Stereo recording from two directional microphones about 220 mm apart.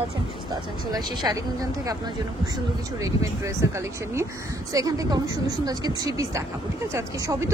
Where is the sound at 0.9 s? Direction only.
15° right (ahead or behind).